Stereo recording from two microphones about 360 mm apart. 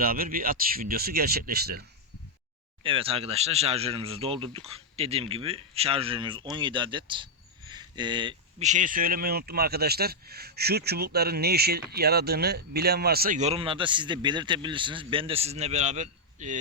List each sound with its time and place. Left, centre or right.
0.0 s speech: right
2.8 s speech: centre